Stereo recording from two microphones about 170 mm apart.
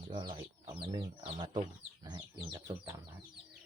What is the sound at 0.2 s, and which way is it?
Speech, 25° right (ahead or behind).